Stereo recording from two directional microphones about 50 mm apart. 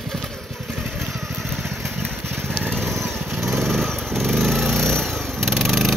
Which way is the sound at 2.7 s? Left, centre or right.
Centre.